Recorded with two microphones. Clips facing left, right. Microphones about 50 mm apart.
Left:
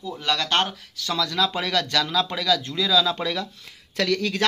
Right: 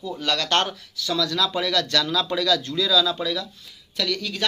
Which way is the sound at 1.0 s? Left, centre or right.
Left.